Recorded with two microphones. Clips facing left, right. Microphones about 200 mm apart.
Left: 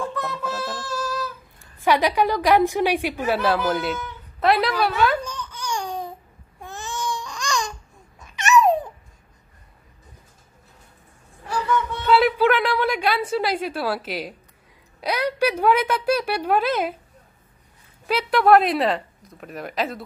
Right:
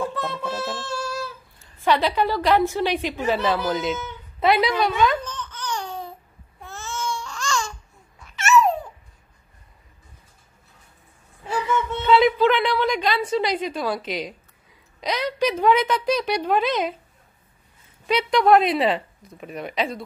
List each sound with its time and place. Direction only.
0.1 s a sound: 30° right (ahead or behind)
1.6 s a woman's voice: 15° left (ahead or behind)
4.4 s babbling: centre (ahead or behind); by 8.8 s 15° left (ahead or behind)
12.1 s a sound: 5° left (ahead or behind)
15.0 s a woman's voice: 10° left (ahead or behind)
18.0 s speech: 5° left (ahead or behind)